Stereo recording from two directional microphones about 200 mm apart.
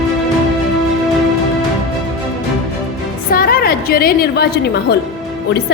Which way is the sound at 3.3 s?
50° left (ahead or behind).